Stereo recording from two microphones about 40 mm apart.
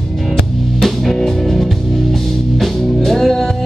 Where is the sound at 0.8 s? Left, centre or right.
Centre.